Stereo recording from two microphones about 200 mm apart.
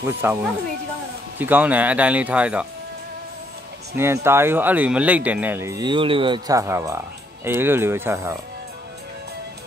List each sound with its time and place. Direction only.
0.0 s speech: 10° right (ahead or behind)
3.9 s speech: 10° right (ahead or behind)